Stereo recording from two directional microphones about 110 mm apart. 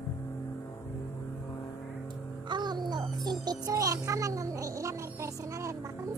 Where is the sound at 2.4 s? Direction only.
40° right (ahead or behind).